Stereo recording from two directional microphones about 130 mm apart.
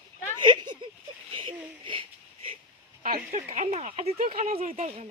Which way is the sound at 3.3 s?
70° right (ahead or behind).